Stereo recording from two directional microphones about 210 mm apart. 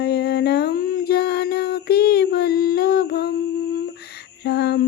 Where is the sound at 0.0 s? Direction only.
50° left (ahead or behind).